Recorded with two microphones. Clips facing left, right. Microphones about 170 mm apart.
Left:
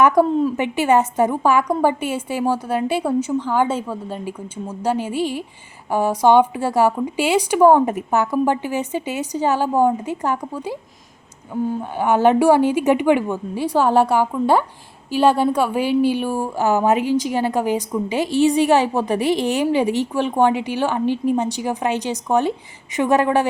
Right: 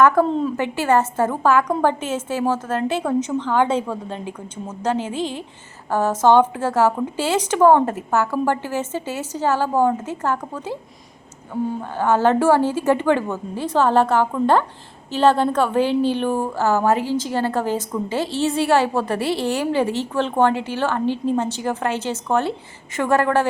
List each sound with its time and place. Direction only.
0.0 s a woman's voice: 15° left (ahead or behind)
11.8 s a woman's voice: 15° left (ahead or behind)